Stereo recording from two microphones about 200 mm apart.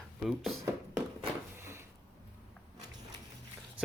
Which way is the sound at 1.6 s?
15° right (ahead or behind).